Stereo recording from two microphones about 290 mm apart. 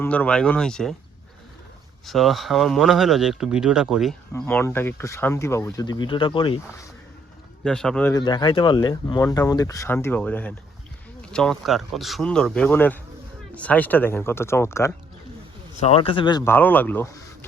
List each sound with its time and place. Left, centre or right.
0.0 s speech: centre
2.0 s speech: centre
7.6 s speech: centre
15.8 s speech: centre